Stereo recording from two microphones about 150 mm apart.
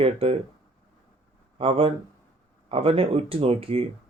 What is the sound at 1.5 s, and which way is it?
Speech, 40° right (ahead or behind).